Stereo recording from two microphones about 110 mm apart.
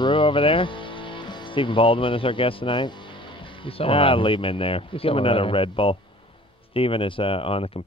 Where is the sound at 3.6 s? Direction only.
55° left (ahead or behind).